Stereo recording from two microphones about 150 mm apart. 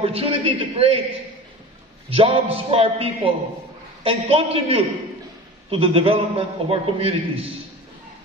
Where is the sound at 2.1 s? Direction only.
40° right (ahead or behind).